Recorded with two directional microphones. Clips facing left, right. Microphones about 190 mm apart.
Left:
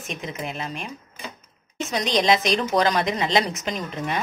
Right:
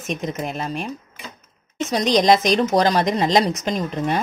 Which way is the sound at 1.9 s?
40° right (ahead or behind).